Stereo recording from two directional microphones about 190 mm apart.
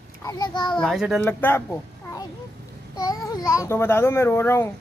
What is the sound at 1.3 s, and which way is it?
Speech, 10° left (ahead or behind).